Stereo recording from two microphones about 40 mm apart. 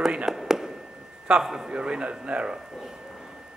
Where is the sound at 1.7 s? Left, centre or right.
Right.